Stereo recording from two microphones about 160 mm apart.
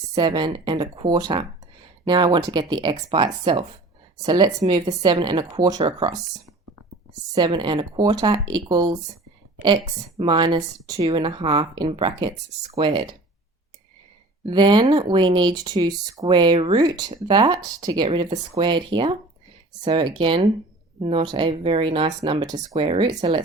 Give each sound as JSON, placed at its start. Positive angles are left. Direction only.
{"t": 0.1, "sound": "speech", "side_deg": -25}
{"t": 10.2, "sound": "speech", "side_deg": -30}
{"t": 14.4, "sound": "speech", "side_deg": -30}